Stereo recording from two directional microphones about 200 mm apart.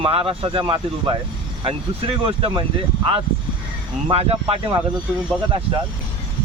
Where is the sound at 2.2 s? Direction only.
25° right (ahead or behind).